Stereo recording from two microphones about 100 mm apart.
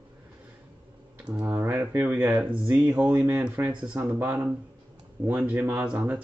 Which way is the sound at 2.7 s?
Centre (ahead or behind).